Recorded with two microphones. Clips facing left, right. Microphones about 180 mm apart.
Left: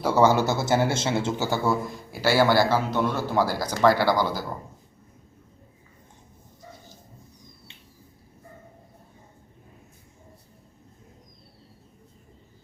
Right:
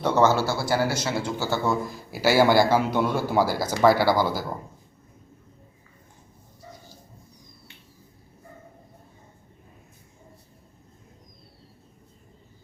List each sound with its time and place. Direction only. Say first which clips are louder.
0.0 s a man's voice: left 1 dB; 10° left (ahead or behind)
1.8 s a man's voice: right 2 dB; 5° right (ahead or behind)